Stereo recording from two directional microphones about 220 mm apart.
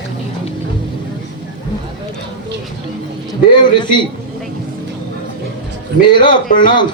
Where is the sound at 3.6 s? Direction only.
20° left (ahead or behind).